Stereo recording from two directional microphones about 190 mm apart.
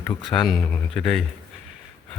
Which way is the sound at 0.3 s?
Centre (ahead or behind).